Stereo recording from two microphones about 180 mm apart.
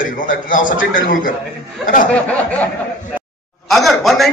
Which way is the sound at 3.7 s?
Centre (ahead or behind).